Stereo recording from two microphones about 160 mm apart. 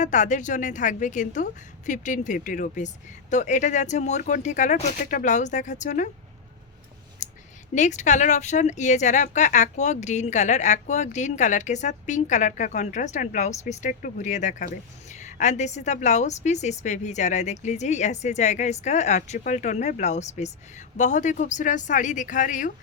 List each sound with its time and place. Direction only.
0.0 s speech: 50° left (ahead or behind)
7.2 s a sound: 50° left (ahead or behind)
7.8 s speech: 50° left (ahead or behind)